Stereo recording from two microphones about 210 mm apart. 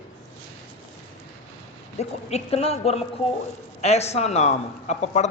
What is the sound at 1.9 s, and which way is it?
A man's voice, 30° left (ahead or behind).